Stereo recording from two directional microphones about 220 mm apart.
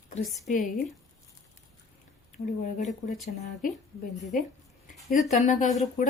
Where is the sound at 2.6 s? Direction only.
35° left (ahead or behind).